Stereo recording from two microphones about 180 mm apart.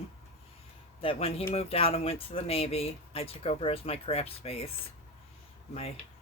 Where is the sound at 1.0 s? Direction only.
30° left (ahead or behind).